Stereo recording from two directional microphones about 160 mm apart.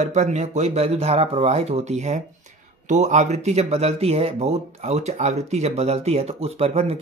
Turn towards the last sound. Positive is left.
turn(degrees=-40)  # may be behind; listen again after turning